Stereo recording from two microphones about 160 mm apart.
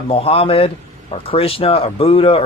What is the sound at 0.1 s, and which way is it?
Speech, 35° left (ahead or behind).